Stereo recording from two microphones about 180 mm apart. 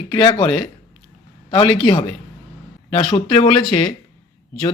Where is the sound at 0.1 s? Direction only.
25° left (ahead or behind).